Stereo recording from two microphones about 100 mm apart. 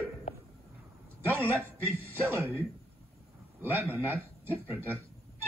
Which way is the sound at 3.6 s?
20° right (ahead or behind).